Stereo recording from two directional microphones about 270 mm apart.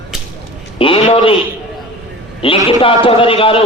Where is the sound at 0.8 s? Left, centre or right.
Centre.